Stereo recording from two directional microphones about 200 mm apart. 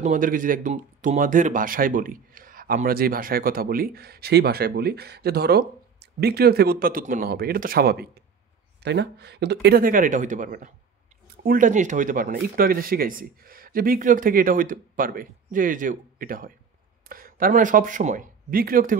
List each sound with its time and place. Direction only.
0.0 s speech: 40° right (ahead or behind)